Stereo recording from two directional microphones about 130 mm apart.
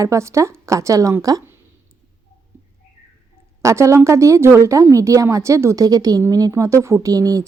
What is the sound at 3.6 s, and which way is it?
A woman's voice, 25° right (ahead or behind).